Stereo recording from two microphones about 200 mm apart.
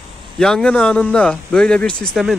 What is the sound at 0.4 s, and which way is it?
Speech, 5° left (ahead or behind).